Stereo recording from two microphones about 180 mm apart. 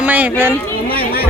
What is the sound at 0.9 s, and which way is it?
Chatter, 60° left (ahead or behind).